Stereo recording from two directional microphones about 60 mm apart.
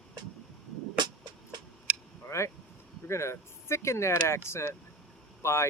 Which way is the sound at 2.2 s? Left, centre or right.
Left.